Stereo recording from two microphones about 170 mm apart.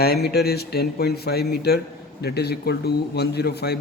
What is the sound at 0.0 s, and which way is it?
A man's voice, 70° left (ahead or behind).